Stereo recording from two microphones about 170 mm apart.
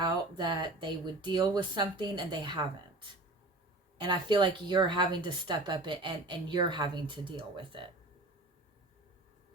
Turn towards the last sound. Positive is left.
turn(degrees=-30)  # may be behind; listen again after turning